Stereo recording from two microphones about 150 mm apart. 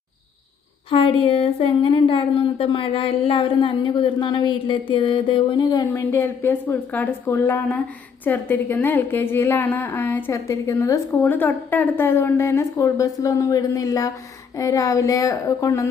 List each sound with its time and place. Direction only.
0.9 s speech: 40° left (ahead or behind)
5.9 s a woman's voice: 15° left (ahead or behind)